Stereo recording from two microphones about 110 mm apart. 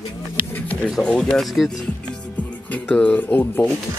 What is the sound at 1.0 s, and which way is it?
Speech, 5° left (ahead or behind).